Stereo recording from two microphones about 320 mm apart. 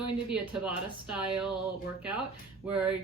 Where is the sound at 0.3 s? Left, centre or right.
Centre.